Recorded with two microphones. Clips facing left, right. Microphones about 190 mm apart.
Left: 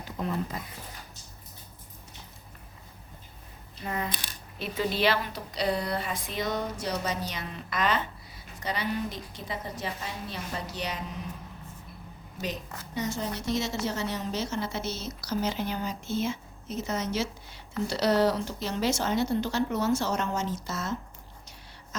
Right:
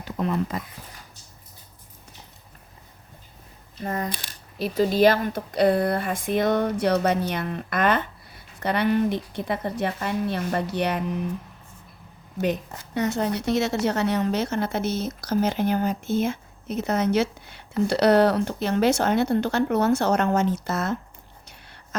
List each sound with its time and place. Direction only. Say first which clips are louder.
0.2 s speech: right 6 dB; 85° right
3.8 s a woman's voice: right 4 dB; 45° right (ahead or behind); by 11.3 s 60° right (ahead or behind)
12.4 s a woman's voice: right 10 dB; 60° right (ahead or behind)